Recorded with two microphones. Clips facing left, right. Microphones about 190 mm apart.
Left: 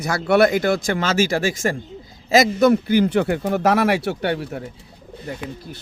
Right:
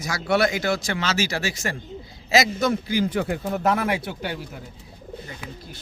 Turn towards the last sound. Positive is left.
turn(degrees=65)  # may be behind; listen again after turning